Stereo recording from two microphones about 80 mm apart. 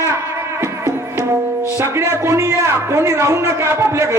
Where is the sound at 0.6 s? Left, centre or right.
Right.